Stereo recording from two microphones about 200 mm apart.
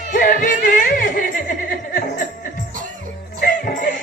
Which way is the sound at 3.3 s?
45° left (ahead or behind).